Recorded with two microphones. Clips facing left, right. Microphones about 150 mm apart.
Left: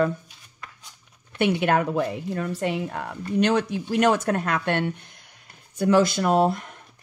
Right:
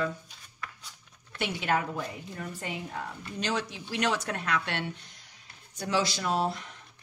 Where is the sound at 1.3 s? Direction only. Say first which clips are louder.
Left 8 dB; 60° left (ahead or behind).